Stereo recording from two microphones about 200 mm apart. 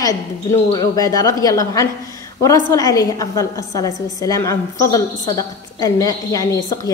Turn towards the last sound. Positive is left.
turn(degrees=20)  # may be behind; listen again after turning